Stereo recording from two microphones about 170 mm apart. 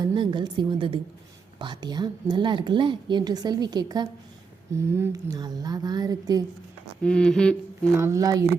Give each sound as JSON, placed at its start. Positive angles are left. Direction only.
{"t": 0.0, "sound": "a woman's voice", "side_deg": -25}
{"t": 7.0, "sound": "a sound", "side_deg": 5}
{"t": 7.9, "sound": "a woman's voice", "side_deg": -15}